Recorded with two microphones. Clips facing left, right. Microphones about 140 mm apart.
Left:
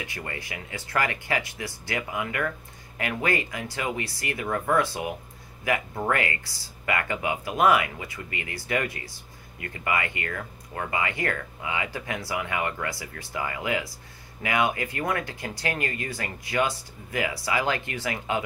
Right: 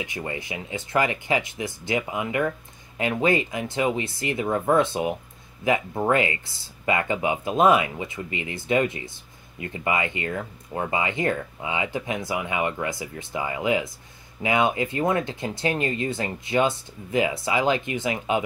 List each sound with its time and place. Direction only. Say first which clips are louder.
0.0 s speech: right 5 dB; 20° right (ahead or behind)